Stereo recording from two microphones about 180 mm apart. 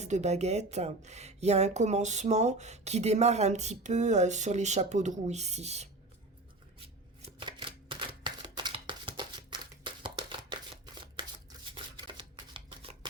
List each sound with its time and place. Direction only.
0.0 s speech: 40° right (ahead or behind)
6.7 s shuffling cards: 30° right (ahead or behind)
11.7 s shuffling cards: 25° right (ahead or behind)